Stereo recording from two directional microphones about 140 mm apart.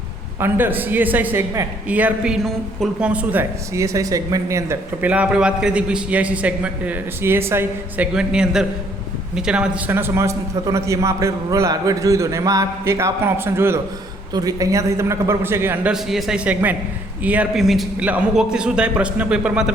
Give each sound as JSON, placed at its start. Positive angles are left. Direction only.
{"t": 0.3, "sound": "a man's voice", "side_deg": -15}
{"t": 3.8, "sound": "a man's voice", "side_deg": -20}
{"t": 8.1, "sound": "a man's voice", "side_deg": -5}